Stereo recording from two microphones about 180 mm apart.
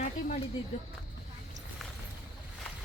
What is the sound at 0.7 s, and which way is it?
Speech, 35° left (ahead or behind).